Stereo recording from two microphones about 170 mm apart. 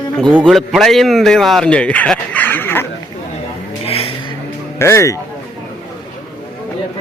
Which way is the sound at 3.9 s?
35° left (ahead or behind).